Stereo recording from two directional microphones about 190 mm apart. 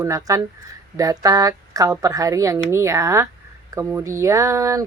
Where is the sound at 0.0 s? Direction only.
15° right (ahead or behind).